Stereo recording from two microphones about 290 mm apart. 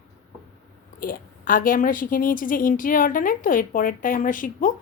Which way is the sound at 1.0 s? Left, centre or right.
Left.